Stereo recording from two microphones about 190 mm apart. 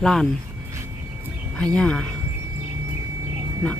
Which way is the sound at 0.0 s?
Centre (ahead or behind).